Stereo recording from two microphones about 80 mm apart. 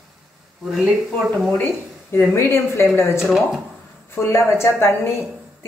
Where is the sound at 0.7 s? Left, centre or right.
Centre.